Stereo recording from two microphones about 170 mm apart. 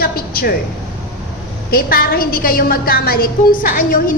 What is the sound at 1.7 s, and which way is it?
A woman's voice, 60° left (ahead or behind).